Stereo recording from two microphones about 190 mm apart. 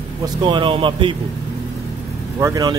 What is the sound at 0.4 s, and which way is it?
Speech, 25° right (ahead or behind).